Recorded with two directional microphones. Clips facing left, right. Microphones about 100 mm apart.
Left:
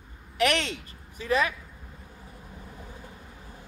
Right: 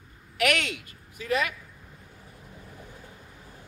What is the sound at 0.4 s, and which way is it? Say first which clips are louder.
Speech: left 1 dB; 30° left (ahead or behind).